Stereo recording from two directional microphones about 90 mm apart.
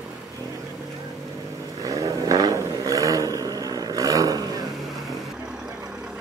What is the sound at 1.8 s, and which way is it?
Vehicle, 40° right (ahead or behind).